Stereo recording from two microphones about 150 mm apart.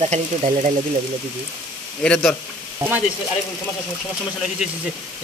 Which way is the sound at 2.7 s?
15° right (ahead or behind).